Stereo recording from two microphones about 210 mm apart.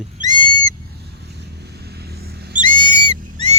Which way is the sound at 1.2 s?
50° right (ahead or behind).